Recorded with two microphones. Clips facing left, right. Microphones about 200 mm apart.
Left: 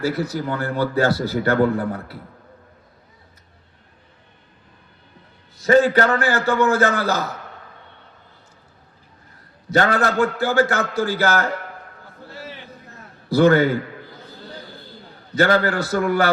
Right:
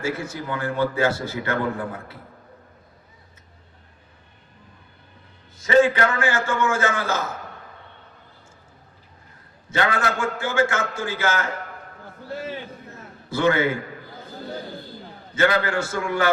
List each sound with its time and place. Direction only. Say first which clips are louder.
0.0 s a man's voice: left 5 dB; 35° left (ahead or behind)
5.6 s a man's voice: left 2 dB; 40° left (ahead or behind)
9.6 s a man's voice: left 5 dB; 40° left (ahead or behind)
13.3 s a man's voice: left 6 dB; 40° left (ahead or behind)
15.4 s a man's voice: left 3 dB; 35° left (ahead or behind)